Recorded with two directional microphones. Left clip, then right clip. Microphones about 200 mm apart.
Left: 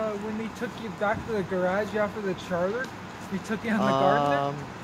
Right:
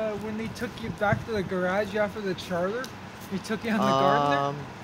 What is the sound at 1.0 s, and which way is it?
Speech, 40° right (ahead or behind).